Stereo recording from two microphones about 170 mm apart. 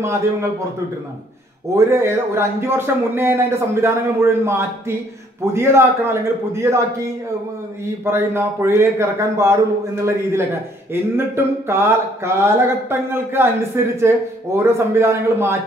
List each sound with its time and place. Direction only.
0.0 s a man's voice: 15° right (ahead or behind)
1.8 s a man's voice: 15° right (ahead or behind)